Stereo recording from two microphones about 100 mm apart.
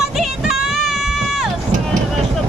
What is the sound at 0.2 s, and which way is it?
Run, 5° right (ahead or behind).